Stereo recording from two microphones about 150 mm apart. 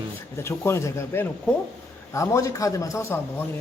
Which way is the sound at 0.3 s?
15° left (ahead or behind).